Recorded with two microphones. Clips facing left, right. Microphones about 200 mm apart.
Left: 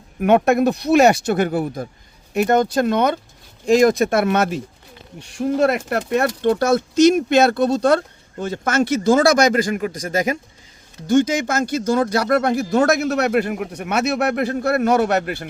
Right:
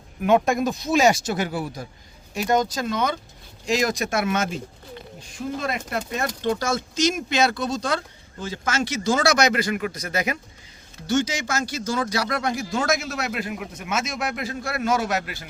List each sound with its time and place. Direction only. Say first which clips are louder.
0.2 s speech: left 5 dB; 60° left (ahead or behind)
5.2 s speech: left 11 dB; 70° left (ahead or behind)